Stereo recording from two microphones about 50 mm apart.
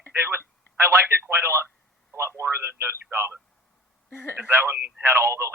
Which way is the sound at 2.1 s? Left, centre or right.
Right.